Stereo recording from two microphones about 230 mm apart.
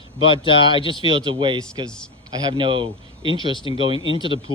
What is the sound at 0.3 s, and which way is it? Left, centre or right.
Speech, left.